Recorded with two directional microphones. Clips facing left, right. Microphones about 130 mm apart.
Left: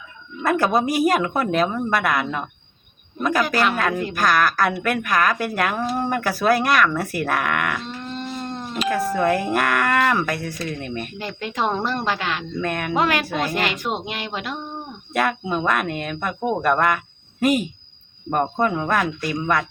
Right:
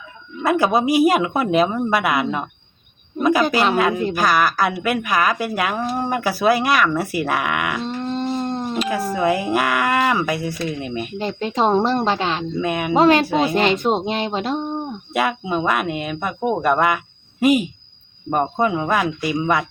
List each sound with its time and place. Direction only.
0.4 s speech: 5° right (ahead or behind)
3.2 s a sound: 5° right (ahead or behind)
3.8 s speech: 5° right (ahead or behind)
7.9 s dog: 30° right (ahead or behind)
9.1 s speech: 5° right (ahead or behind)
11.2 s speech: 25° right (ahead or behind)
12.5 s speech: 10° right (ahead or behind)
12.9 s speech: 25° right (ahead or behind)
15.1 s speech: 5° right (ahead or behind)